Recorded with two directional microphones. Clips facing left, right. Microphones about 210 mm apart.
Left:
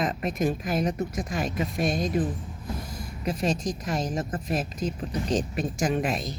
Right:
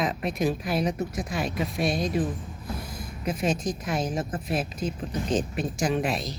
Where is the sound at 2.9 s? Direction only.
40° left (ahead or behind).